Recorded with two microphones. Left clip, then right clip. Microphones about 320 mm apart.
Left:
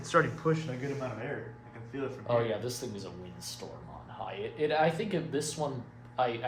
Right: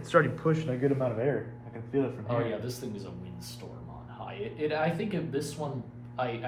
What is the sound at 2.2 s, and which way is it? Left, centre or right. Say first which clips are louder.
Speech: left 2 dB; left.